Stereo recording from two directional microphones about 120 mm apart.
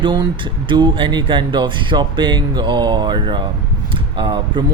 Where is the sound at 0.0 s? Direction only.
40° right (ahead or behind).